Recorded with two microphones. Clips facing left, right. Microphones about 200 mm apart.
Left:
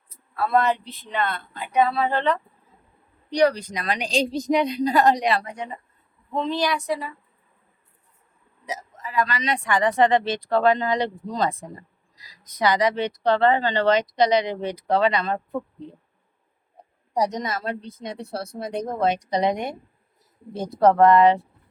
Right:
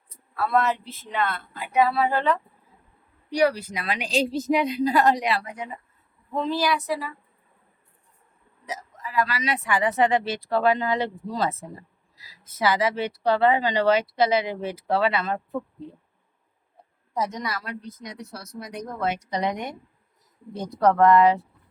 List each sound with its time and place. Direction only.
0.1 s speech: centre (ahead or behind)
8.7 s a sound: 20° left (ahead or behind)
9.1 s speech: 5° right (ahead or behind)
17.2 s a woman's voice: 20° left (ahead or behind)